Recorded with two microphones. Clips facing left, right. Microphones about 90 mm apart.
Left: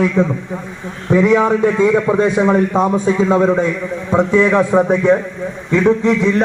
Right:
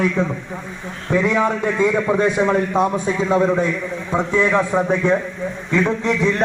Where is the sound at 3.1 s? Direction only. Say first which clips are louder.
Left 4 dB; 30° left (ahead or behind).